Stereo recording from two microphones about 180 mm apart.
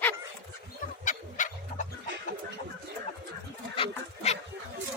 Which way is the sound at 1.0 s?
45° left (ahead or behind).